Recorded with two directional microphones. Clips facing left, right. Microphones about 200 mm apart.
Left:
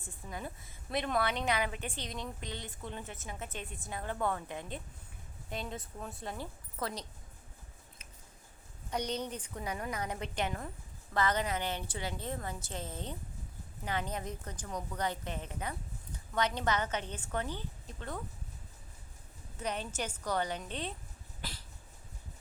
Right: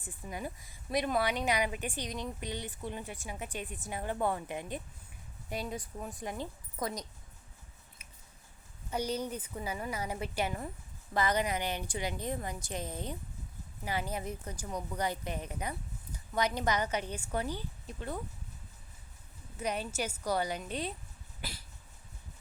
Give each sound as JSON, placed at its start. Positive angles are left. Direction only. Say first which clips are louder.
{"t": 0.0, "sound": "a woman's voice", "louder": "right 2 dB", "side_deg": -15}
{"t": 8.9, "sound": "a woman's voice", "louder": "right 2 dB", "side_deg": -10}
{"t": 19.5, "sound": "a woman's voice", "louder": "right 2 dB", "side_deg": -10}